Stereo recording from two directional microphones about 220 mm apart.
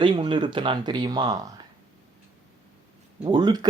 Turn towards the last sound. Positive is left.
turn(degrees=-20)  # may be behind; listen again after turning